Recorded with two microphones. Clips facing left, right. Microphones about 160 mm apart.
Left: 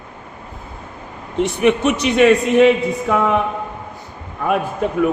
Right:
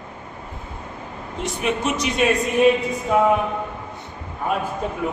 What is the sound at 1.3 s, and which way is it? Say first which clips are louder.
A man's voice: left 9 dB; 65° left (ahead or behind).